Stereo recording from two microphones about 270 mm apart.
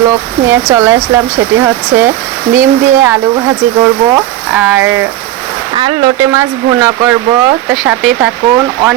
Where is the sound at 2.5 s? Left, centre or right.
Centre.